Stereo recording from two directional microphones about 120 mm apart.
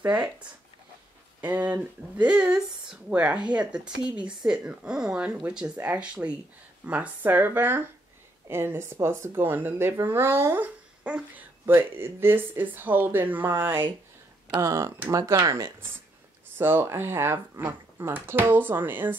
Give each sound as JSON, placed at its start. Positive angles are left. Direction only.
{"t": 0.0, "sound": "speech", "side_deg": -10}
{"t": 1.4, "sound": "speech", "side_deg": -15}